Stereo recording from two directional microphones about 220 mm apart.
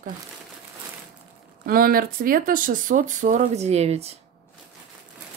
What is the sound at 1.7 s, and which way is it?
Speech, 40° right (ahead or behind).